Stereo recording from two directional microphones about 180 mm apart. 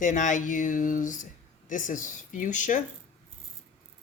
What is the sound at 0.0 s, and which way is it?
Speech, 45° left (ahead or behind).